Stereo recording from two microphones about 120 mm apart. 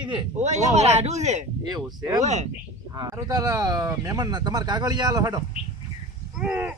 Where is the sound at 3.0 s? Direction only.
30° right (ahead or behind).